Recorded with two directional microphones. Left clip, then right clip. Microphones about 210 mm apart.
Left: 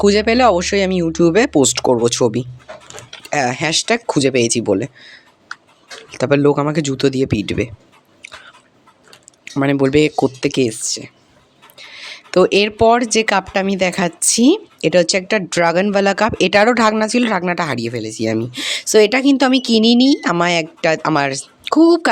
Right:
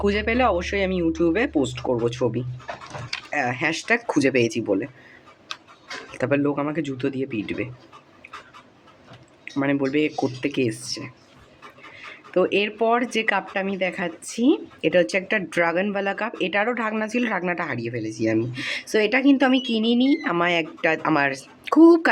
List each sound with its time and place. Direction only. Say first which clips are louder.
0.0 s speech: left 9 dB; 45° left (ahead or behind)
6.1 s speech: left 7 dB; 30° left (ahead or behind)
6.4 s speech: left 9 dB; 45° left (ahead or behind)
9.4 s speech: left 7 dB; 45° left (ahead or behind)
11.9 s speech: left 8 dB; 45° left (ahead or behind)
14.8 s speech: left 6 dB; 35° left (ahead or behind)
18.0 s speech: left 4 dB; 65° left (ahead or behind)
18.3 s speech: left 4 dB; 40° left (ahead or behind)